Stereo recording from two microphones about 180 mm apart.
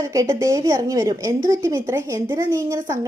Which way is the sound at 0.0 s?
20° right (ahead or behind).